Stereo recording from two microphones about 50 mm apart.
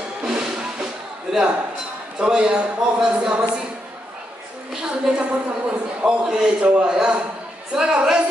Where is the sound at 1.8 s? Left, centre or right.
Centre.